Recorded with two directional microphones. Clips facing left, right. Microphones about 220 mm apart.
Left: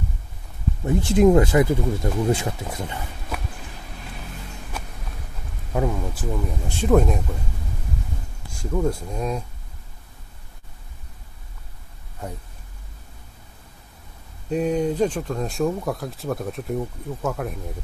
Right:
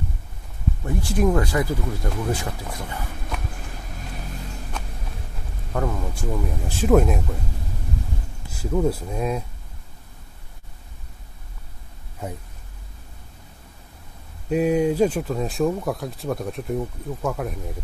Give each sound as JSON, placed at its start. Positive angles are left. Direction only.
{"t": 0.8, "sound": "speech", "side_deg": 25}
{"t": 4.7, "sound": "a sound", "side_deg": 5}
{"t": 5.7, "sound": "speech", "side_deg": 10}
{"t": 6.3, "sound": "speech", "side_deg": 0}
{"t": 8.5, "sound": "speech", "side_deg": -5}
{"t": 14.5, "sound": "speech", "side_deg": -10}